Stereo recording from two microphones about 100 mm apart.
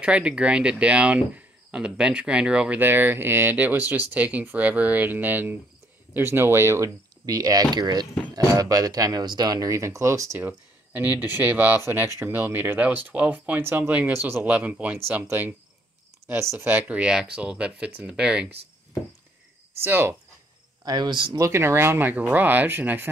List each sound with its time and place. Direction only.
0.0 s speech: 10° right (ahead or behind)
2.8 s speech: 20° right (ahead or behind)
19.8 s speech: 20° right (ahead or behind)
20.8 s speech: 45° right (ahead or behind)
21.4 s speech: 25° right (ahead or behind)